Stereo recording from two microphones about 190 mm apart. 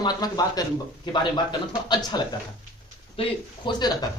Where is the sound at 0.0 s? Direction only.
20° left (ahead or behind).